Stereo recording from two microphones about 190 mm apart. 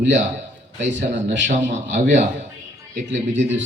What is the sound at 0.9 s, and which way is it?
A man's voice, 70° right (ahead or behind).